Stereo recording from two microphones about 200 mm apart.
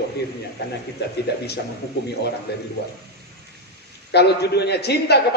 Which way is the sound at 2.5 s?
55° left (ahead or behind).